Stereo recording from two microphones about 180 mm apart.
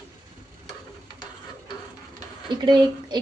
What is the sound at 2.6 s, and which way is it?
Speech, 25° right (ahead or behind).